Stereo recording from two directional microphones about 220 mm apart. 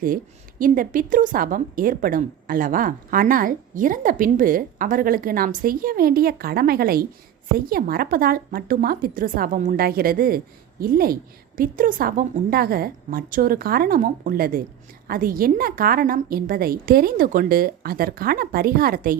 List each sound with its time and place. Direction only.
0.6 s speech: 40° right (ahead or behind)